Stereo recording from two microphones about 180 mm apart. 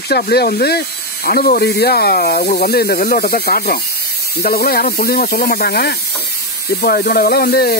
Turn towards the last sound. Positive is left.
turn(degrees=60)  # may be behind; listen again after turning